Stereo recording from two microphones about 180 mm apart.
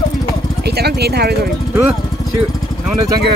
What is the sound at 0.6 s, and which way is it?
Vehicle, 65° right (ahead or behind).